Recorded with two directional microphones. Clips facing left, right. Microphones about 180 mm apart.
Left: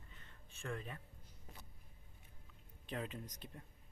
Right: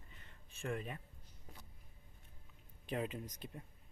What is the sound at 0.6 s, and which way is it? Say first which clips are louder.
Speech: right 4 dB; 15° right (ahead or behind).